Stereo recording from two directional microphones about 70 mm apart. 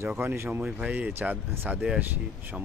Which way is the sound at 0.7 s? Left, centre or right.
Right.